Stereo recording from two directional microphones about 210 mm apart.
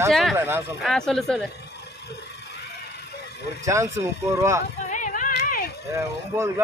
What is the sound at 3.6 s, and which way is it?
A man's voice, 15° right (ahead or behind).